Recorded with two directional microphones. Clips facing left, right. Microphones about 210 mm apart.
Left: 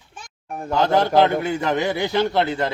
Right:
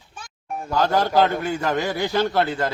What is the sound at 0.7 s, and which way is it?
A man's voice, 20° left (ahead or behind).